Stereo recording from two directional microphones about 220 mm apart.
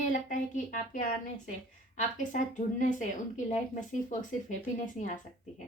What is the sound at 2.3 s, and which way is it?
Speech, 35° left (ahead or behind).